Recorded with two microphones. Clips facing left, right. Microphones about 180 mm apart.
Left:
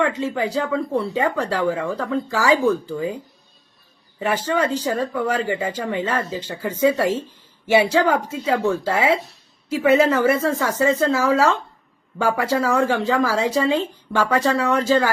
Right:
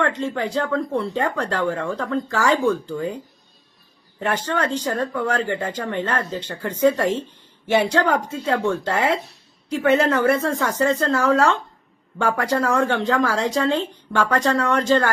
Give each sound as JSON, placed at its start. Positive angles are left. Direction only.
{"t": 0.0, "sound": "speech", "side_deg": 5}
{"t": 4.2, "sound": "speech", "side_deg": 5}